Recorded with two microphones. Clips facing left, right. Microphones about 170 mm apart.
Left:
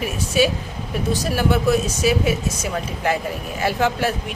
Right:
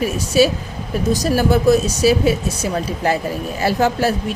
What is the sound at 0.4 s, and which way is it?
Speech, 35° right (ahead or behind).